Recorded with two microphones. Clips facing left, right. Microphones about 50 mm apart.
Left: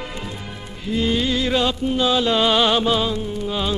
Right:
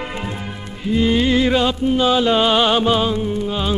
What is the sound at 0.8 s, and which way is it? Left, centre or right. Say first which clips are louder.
Music: right 4 dB; centre.